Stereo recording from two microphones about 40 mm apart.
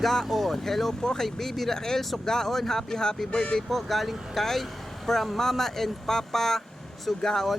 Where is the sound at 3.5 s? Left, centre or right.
Centre.